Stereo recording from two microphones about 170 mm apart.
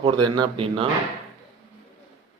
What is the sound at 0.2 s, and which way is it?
Speech, 30° right (ahead or behind).